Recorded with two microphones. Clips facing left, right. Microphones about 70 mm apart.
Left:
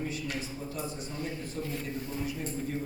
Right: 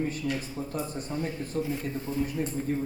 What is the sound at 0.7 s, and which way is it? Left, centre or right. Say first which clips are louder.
Speech: right 4 dB; right.